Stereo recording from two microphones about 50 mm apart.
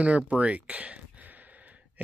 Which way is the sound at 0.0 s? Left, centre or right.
Right.